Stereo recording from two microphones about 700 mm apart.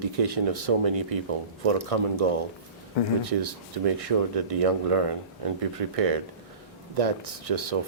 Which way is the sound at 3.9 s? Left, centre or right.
Right.